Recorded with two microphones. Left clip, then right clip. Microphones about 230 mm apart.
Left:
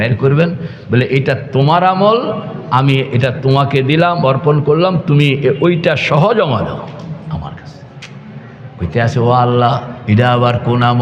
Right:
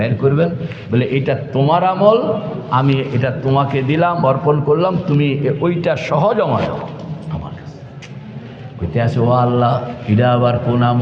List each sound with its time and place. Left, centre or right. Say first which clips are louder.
0.0 s a man's voice: left 2 dB; left
8.9 s a man's voice: left 3 dB; left